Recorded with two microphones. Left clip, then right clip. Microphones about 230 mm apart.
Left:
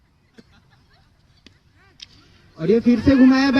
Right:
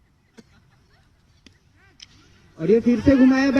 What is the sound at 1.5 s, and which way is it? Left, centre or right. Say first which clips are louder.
Honk: left 2 dB; centre.